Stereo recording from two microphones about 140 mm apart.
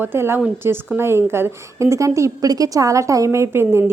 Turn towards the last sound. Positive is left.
turn(degrees=-15)  # may be behind; listen again after turning